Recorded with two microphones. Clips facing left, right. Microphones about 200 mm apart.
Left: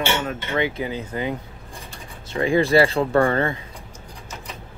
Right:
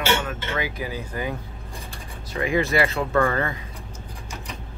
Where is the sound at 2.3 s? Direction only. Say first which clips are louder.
Left 4 dB; 30° left (ahead or behind).